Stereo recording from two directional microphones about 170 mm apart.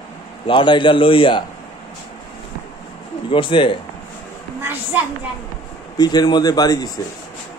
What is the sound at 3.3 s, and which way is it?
Speech, 30° left (ahead or behind).